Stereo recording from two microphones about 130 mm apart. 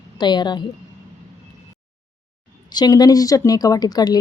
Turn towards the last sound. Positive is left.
turn(degrees=30)  # may be behind; listen again after turning